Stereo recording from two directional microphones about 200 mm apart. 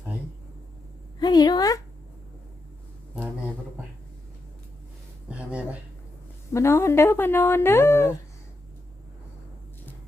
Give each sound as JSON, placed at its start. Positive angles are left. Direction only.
{"t": 1.2, "sound": "a woman's voice", "side_deg": 20}
{"t": 5.3, "sound": "a sound", "side_deg": -5}
{"t": 6.5, "sound": "speech", "side_deg": 15}